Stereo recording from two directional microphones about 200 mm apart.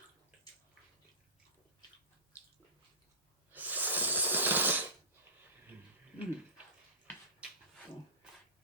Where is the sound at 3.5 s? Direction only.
10° right (ahead or behind).